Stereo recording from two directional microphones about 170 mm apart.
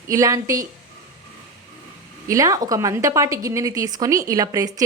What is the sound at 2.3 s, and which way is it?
A woman's voice, 20° right (ahead or behind).